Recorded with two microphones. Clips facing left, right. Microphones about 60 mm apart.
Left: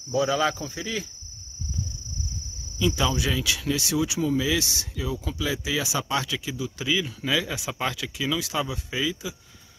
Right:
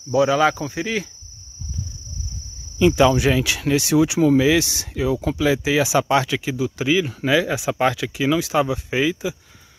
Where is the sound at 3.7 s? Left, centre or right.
Right.